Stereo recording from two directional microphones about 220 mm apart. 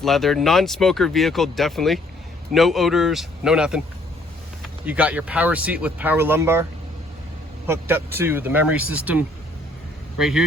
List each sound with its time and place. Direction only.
0.0 s speech: centre (ahead or behind)
7.7 s speech: 10° right (ahead or behind)